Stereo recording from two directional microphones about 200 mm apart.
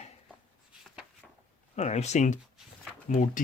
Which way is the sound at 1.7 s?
35° left (ahead or behind).